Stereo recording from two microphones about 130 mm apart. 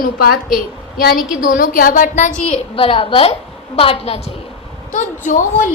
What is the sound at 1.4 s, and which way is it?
A woman's voice, 90° left.